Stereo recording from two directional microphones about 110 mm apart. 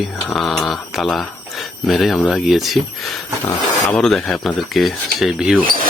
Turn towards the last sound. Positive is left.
turn(degrees=-5)  # may be behind; listen again after turning